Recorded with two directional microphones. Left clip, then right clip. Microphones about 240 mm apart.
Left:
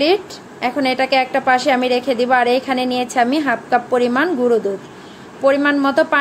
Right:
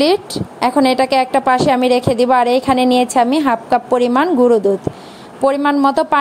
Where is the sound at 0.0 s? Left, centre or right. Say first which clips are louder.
Right 2 dB; right.